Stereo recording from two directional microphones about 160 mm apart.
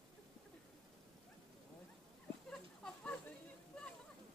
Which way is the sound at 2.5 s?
5° left (ahead or behind).